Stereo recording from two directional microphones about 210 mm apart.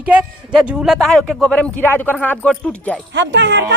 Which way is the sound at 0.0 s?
5° right (ahead or behind).